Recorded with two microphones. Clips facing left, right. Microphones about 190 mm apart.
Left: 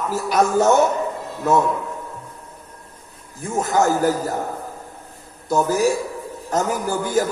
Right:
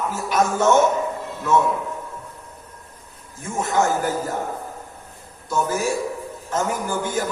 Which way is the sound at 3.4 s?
40° left (ahead or behind).